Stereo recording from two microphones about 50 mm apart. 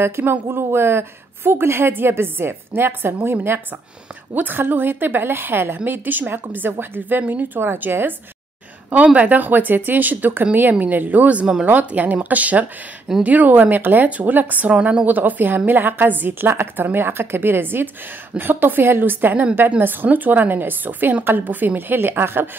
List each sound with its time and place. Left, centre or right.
0.0 s a woman's voice: right
8.9 s a woman's voice: right